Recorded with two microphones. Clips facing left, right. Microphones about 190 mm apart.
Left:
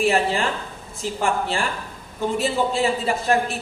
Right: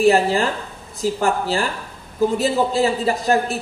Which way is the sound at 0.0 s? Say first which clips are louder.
Right 5 dB; 35° right (ahead or behind).